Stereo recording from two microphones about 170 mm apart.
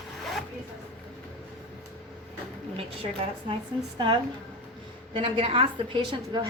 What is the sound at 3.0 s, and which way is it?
A woman's voice, 30° right (ahead or behind).